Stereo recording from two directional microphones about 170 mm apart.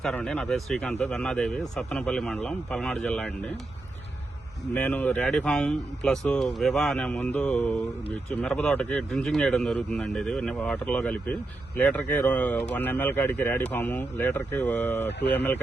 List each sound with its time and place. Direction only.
0.0 s speech: 5° left (ahead or behind)
4.7 s speech: 10° left (ahead or behind)